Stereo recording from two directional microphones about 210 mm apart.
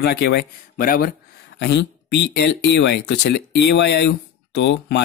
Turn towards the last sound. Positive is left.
turn(degrees=55)  # may be behind; listen again after turning